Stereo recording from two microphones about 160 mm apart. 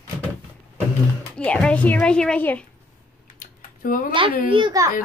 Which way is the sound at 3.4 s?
60° left (ahead or behind).